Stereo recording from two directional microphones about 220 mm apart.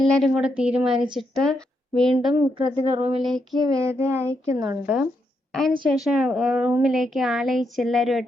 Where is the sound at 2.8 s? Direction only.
25° right (ahead or behind).